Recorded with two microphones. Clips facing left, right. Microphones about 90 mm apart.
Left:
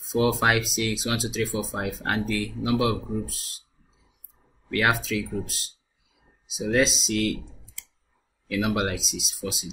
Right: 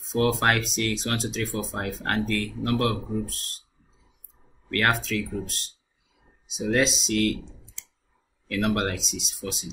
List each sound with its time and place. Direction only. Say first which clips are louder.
0.0 s speech: left 1 dB; centre (ahead or behind)
4.6 s speech: left 1 dB; 5° left (ahead or behind)
7.4 s clicking: right 2 dB; 25° right (ahead or behind)
8.5 s speech: even; 5° left (ahead or behind)